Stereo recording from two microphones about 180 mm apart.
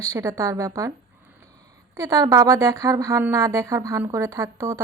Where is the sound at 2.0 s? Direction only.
20° right (ahead or behind).